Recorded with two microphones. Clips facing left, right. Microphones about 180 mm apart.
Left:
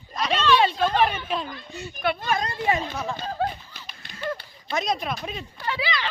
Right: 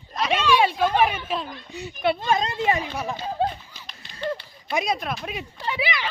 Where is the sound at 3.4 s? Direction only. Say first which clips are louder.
Right 2 dB; 25° right (ahead or behind).